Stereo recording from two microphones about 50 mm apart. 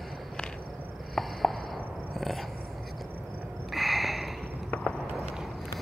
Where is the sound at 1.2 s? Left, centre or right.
Centre.